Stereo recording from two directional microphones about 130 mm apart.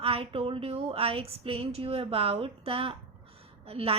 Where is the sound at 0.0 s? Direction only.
45° right (ahead or behind).